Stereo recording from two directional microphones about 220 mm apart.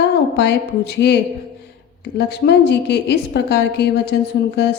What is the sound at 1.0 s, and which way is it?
Speech, 50° left (ahead or behind).